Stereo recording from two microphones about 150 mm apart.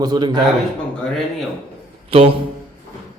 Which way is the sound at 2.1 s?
40° right (ahead or behind).